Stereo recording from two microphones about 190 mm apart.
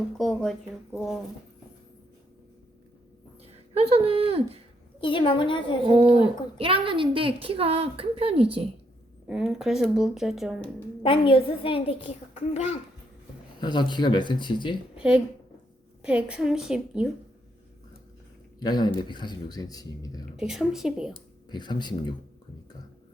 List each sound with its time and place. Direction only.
0.2 s speech: centre (ahead or behind)
3.4 s speech: 30° right (ahead or behind)
4.9 s a child's voice: 25° left (ahead or behind)
6.6 s a woman's voice: 30° right (ahead or behind)
9.2 s speech: centre (ahead or behind)
11.0 s a child's voice: 30° left (ahead or behind)
13.6 s a child's voice: 25° left (ahead or behind)
16.0 s speech: 5° right (ahead or behind)
18.6 s a child's voice: 20° left (ahead or behind)
20.3 s speech: 5° right (ahead or behind)
21.5 s a child's voice: 25° left (ahead or behind)